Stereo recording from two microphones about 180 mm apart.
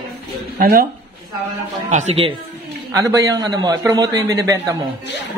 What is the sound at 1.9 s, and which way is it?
Speech, 40° right (ahead or behind).